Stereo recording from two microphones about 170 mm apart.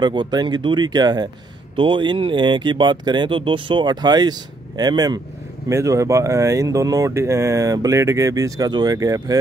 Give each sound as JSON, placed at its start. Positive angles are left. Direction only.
{"t": 0.0, "sound": "speech", "side_deg": -25}